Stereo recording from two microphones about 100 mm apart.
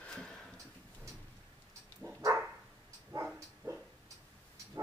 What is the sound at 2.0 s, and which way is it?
Dog, 25° right (ahead or behind).